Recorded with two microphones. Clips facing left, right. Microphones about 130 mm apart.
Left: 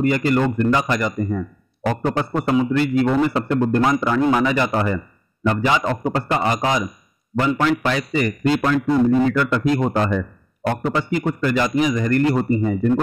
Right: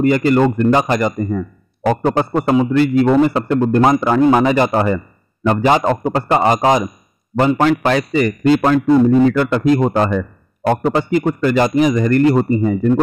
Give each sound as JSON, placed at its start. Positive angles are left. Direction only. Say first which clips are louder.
{"t": 0.0, "sound": "a man's voice", "louder": "right 5 dB", "side_deg": -45}
{"t": 6.1, "sound": "a man's voice", "louder": "right 7 dB", "side_deg": -35}
{"t": 6.5, "sound": "a man's voice", "louder": "right 7 dB", "side_deg": -45}
{"t": 10.6, "sound": "a man's voice", "louder": "right 6 dB", "side_deg": -30}
{"t": 11.0, "sound": "a man's voice", "louder": "right 5 dB", "side_deg": -50}